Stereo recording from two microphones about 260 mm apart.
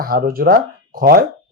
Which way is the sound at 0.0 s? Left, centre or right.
Right.